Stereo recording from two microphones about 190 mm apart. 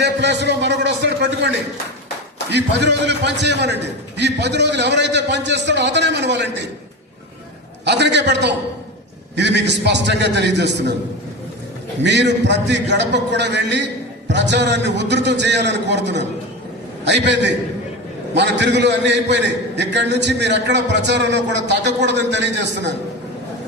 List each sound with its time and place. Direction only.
0.0 s a man's voice: 65° right (ahead or behind)
7.9 s a man's voice: 65° right (ahead or behind)
12.0 s a man's voice: 65° right (ahead or behind)